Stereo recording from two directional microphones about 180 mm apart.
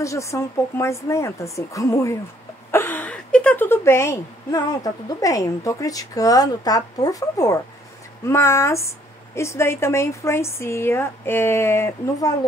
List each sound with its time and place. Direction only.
0.0 s a woman's voice: 15° left (ahead or behind)